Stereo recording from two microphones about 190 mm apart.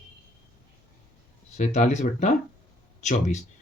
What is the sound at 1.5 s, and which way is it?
Speech, 40° left (ahead or behind).